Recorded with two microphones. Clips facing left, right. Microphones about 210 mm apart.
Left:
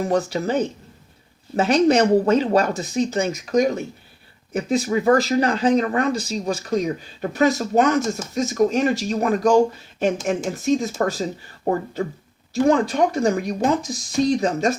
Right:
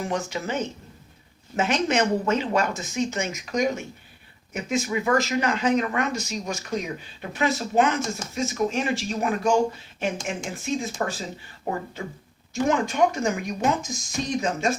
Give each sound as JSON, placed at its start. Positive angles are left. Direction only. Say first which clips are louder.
{"t": 0.0, "sound": "speech", "louder": "left 7 dB", "side_deg": 35}